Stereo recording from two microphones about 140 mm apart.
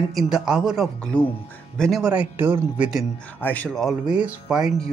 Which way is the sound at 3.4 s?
10° left (ahead or behind).